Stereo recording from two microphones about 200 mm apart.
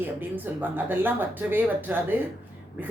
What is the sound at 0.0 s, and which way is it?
A woman's voice, 10° right (ahead or behind).